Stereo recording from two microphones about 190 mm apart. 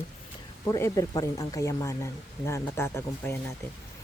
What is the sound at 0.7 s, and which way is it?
Speech, 20° left (ahead or behind).